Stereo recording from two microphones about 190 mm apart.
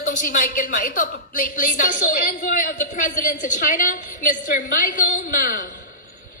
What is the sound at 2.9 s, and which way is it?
A woman's voice, 45° left (ahead or behind).